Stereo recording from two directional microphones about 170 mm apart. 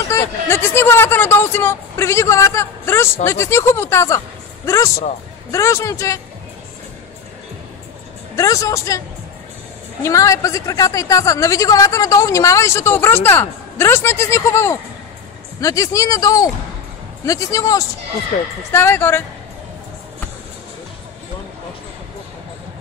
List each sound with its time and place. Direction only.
0.1 s speech: 15° left (ahead or behind)
8.4 s a woman's voice: 20° left (ahead or behind)
10.0 s a woman's voice: 20° left (ahead or behind)
18.3 s speech: 45° left (ahead or behind)
18.7 s speech: 15° left (ahead or behind)